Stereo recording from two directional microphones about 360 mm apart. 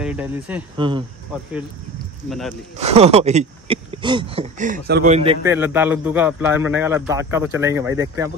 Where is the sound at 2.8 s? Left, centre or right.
Centre.